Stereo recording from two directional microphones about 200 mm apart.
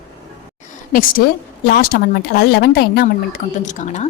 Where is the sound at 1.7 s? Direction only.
50° left (ahead or behind).